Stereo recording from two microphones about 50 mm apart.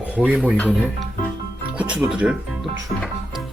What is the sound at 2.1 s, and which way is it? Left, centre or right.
Speech, right.